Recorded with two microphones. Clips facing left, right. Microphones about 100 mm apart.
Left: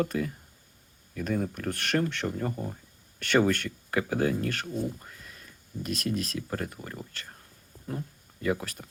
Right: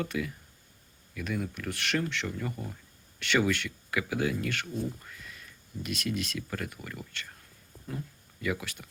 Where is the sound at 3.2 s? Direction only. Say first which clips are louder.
Left 3 dB; 45° left (ahead or behind).